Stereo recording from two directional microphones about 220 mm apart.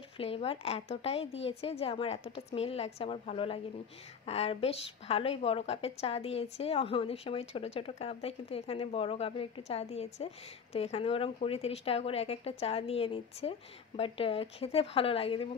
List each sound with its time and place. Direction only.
0.2 s a woman's voice: 25° left (ahead or behind)